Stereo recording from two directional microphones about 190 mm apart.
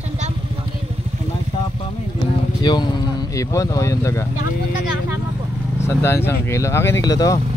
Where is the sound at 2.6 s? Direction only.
20° left (ahead or behind).